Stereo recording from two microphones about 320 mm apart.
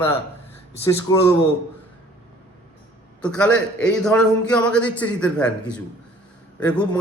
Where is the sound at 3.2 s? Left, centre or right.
Centre.